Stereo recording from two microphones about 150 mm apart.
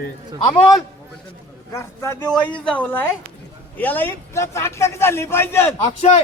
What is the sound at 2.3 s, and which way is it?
A man's voice, 10° left (ahead or behind).